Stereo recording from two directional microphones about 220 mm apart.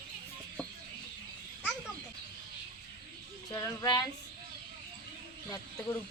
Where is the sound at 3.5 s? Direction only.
15° left (ahead or behind).